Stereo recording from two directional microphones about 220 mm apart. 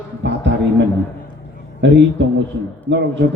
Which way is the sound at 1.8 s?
50° right (ahead or behind).